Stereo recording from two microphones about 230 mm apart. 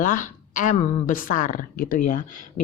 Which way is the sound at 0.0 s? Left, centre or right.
Left.